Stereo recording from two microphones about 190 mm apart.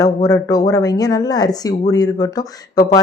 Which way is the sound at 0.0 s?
20° left (ahead or behind).